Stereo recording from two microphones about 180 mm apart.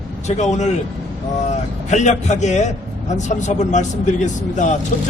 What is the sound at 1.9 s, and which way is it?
A man's voice, 40° left (ahead or behind).